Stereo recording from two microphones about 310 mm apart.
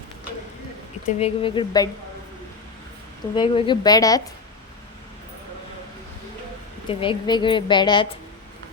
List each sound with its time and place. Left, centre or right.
1.0 s a woman's voice: centre
3.3 s a woman's voice: centre
6.8 s a woman's voice: centre